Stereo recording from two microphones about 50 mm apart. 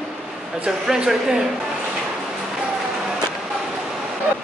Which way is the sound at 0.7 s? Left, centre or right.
Centre.